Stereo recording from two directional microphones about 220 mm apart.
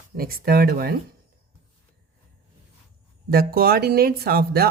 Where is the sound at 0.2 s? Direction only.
40° right (ahead or behind).